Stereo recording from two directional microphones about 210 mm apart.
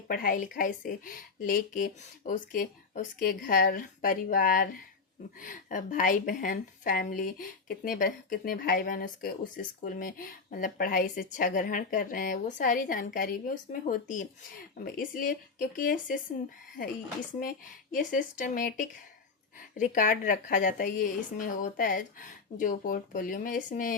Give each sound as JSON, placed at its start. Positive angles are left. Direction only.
{"t": 0.1, "sound": "a woman's voice", "side_deg": 45}